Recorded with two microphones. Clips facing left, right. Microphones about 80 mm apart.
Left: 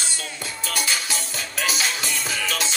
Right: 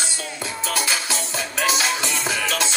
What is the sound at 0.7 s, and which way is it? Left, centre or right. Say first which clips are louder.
Music: right 1 dB; right.